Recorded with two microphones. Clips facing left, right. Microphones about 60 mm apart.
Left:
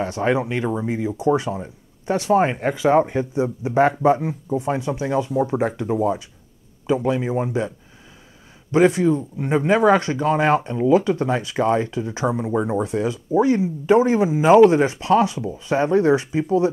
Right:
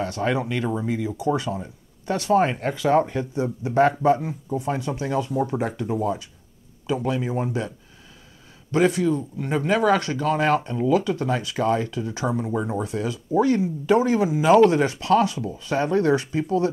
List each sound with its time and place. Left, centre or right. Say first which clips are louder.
0.0 s speech: left 3 dB; left
8.7 s speech: left 4 dB; left